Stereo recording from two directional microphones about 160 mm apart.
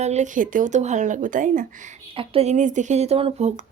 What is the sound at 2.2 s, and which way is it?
Speech, 40° right (ahead or behind).